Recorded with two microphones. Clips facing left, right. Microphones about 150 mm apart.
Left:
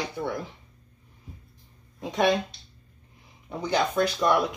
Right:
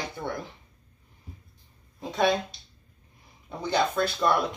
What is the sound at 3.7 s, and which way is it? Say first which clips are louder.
Speech: left 1 dB; 15° left (ahead or behind).